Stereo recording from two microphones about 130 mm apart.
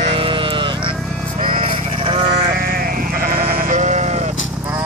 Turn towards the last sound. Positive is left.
turn(degrees=-65)  # may be behind; listen again after turning